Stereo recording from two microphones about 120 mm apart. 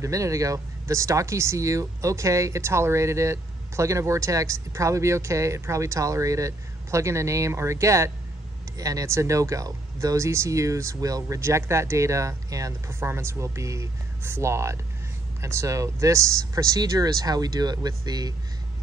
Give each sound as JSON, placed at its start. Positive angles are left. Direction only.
{"t": 0.0, "sound": "speech", "side_deg": -25}